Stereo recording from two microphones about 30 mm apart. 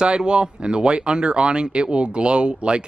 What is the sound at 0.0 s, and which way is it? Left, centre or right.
Speech, right.